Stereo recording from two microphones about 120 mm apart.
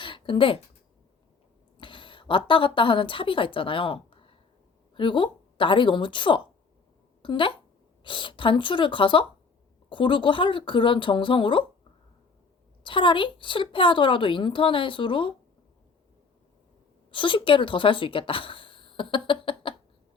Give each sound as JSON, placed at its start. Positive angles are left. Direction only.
{"t": 0.0, "sound": "a sound", "side_deg": 45}
{"t": 1.8, "sound": "a woman's voice", "side_deg": 45}
{"t": 12.8, "sound": "a woman's voice", "side_deg": 45}
{"t": 17.1, "sound": "speech", "side_deg": 45}